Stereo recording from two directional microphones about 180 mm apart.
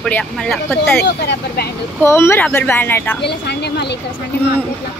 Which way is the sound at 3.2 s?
70° left (ahead or behind).